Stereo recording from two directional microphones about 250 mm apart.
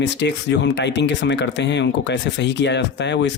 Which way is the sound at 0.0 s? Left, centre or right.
Left.